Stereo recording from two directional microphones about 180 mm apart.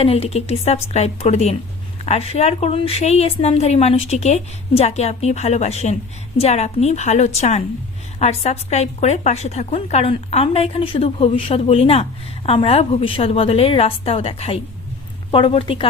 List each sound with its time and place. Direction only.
0.0 s a woman's voice: 35° left (ahead or behind)